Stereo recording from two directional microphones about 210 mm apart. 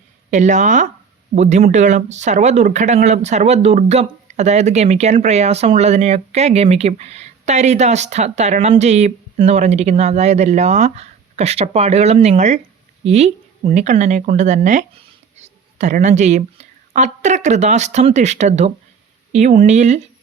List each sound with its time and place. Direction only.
0.3 s speech: 35° right (ahead or behind)
15.4 s a sound: 35° right (ahead or behind)
16.9 s speech: 35° right (ahead or behind)